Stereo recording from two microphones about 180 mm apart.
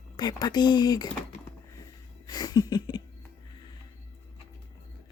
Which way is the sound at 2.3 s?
20° left (ahead or behind).